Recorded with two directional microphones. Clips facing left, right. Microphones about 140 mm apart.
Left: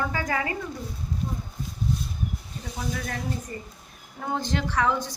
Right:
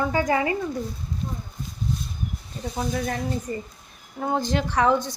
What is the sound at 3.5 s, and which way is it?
Speech, 25° right (ahead or behind).